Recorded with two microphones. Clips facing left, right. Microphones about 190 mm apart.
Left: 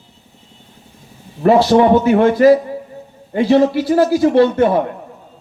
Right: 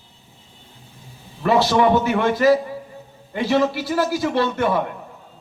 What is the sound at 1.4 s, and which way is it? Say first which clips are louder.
A man's voice: left 6 dB; 45° left (ahead or behind).